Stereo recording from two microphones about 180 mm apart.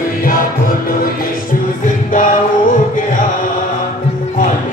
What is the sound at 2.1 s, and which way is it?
Music, 45° left (ahead or behind).